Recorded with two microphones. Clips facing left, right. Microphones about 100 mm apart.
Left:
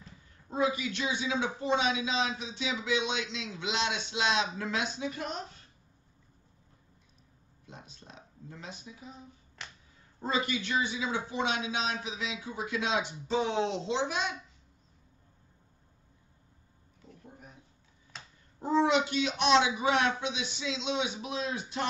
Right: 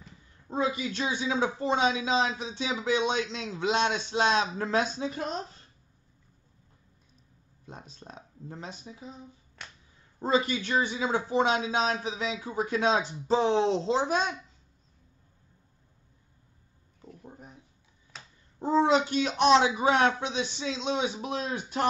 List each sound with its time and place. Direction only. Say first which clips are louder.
0.5 s speech: right 1 dB; 30° right (ahead or behind)
7.6 s speech: right 5 dB; 35° right (ahead or behind)
10.2 s speech: right 5 dB; 35° right (ahead or behind)
18.6 s speech: right 3 dB; 30° right (ahead or behind)